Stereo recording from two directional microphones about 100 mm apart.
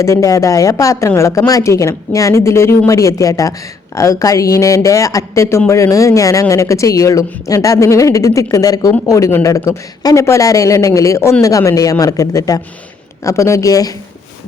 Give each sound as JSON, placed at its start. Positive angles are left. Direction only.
{"t": 0.0, "sound": "a woman's voice", "side_deg": 30}